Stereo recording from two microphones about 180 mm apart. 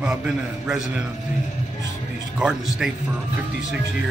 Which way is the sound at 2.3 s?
5° right (ahead or behind).